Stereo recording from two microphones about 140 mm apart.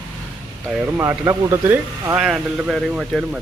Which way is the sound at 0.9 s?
20° right (ahead or behind).